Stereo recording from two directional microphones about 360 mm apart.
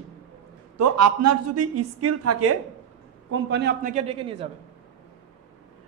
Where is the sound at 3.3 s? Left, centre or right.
Right.